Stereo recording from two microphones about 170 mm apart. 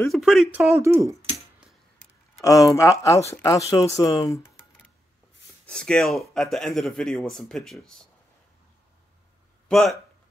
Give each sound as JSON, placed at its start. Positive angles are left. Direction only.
{"t": 0.1, "sound": "speech", "side_deg": 0}
{"t": 0.7, "sound": "speech", "side_deg": -15}
{"t": 2.4, "sound": "speech", "side_deg": 20}
{"t": 5.7, "sound": "speech", "side_deg": 5}
{"t": 9.7, "sound": "speech", "side_deg": 0}